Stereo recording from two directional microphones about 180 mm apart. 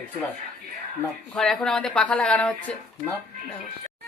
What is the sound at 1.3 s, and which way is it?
A woman's voice, centre (ahead or behind).